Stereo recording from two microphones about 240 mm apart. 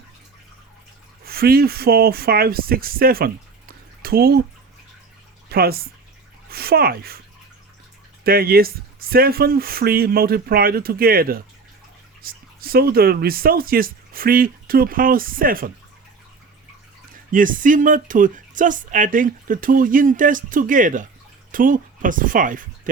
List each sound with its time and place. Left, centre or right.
1.2 s speech: right
5.5 s speech: right
8.2 s speech: right
17.3 s speech: right